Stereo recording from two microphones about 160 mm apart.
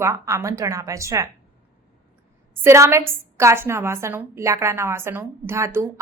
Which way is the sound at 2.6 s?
15° right (ahead or behind).